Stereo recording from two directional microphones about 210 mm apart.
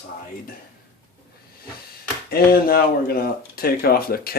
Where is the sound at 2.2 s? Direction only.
45° left (ahead or behind).